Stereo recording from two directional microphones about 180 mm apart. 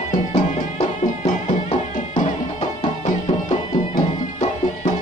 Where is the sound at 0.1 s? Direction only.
35° left (ahead or behind).